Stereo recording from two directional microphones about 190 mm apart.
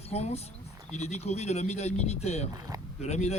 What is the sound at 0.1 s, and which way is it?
Speech, 35° left (ahead or behind).